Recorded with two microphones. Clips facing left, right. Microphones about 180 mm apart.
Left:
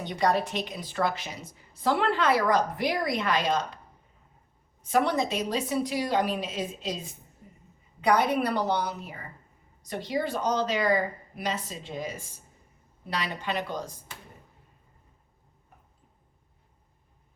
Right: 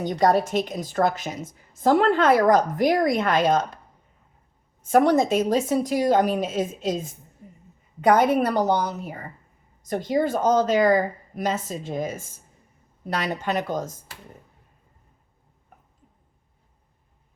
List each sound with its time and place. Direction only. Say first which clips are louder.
0.0 s a woman's voice: right 6 dB; 45° right (ahead or behind)
4.8 s a woman's voice: right 7 dB; 50° right (ahead or behind)